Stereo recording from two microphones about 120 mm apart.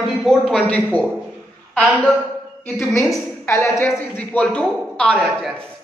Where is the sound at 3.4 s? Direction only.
20° left (ahead or behind).